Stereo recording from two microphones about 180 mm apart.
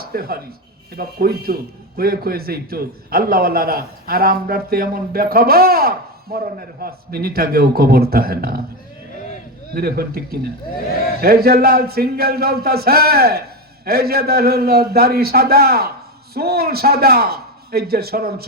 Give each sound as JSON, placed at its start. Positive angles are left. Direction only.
{"t": 0.0, "sound": "a man's voice", "side_deg": -55}
{"t": 9.7, "sound": "a man's voice", "side_deg": -60}